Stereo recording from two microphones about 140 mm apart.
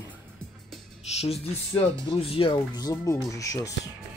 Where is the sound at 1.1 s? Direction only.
45° left (ahead or behind); by 3.7 s 25° left (ahead or behind).